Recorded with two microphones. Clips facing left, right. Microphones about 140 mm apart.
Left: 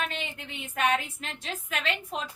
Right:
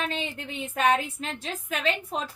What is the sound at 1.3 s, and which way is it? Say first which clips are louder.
Speech: left 1 dB; 35° right (ahead or behind).